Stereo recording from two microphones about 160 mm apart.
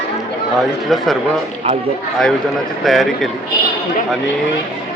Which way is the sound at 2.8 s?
Centre (ahead or behind).